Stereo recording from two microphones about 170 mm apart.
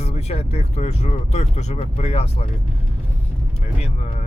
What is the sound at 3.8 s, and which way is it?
Speech, 40° left (ahead or behind).